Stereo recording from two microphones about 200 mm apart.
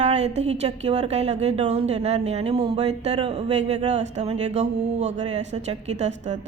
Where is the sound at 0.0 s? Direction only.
30° right (ahead or behind).